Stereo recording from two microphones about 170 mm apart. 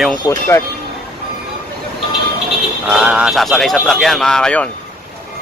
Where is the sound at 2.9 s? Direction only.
5° right (ahead or behind).